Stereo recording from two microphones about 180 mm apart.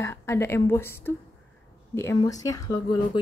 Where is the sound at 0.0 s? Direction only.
15° left (ahead or behind).